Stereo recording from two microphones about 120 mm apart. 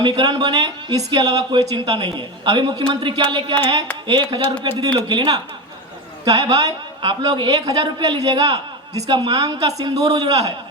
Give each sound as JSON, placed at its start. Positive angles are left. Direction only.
{"t": 0.0, "sound": "speech", "side_deg": -40}